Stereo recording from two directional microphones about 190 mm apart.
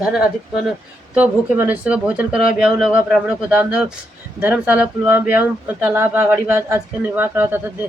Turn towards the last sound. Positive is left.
turn(degrees=-10)  # may be behind; listen again after turning